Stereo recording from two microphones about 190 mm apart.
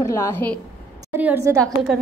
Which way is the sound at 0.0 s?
15° left (ahead or behind).